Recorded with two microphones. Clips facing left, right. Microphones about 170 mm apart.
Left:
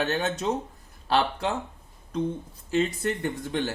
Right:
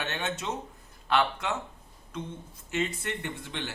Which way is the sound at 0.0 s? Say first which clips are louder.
Left 7 dB; 35° left (ahead or behind).